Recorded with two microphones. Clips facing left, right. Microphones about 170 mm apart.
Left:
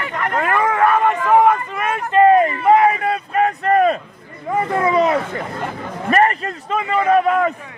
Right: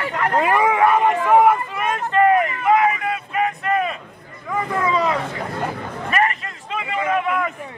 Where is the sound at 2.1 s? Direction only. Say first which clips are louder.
Left 5 dB; 25° left (ahead or behind); by 3.9 s 40° left (ahead or behind).